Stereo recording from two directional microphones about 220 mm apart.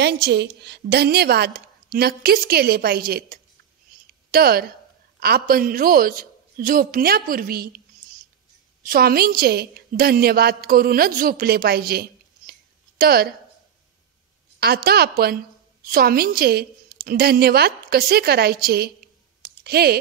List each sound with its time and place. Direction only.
0.0 s a woman's voice: 50° right (ahead or behind)
14.6 s a woman's voice: 45° right (ahead or behind)
19.4 s a sound: 45° right (ahead or behind)